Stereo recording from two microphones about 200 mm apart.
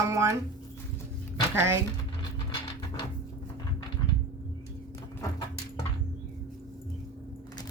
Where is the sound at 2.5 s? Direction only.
25° left (ahead or behind).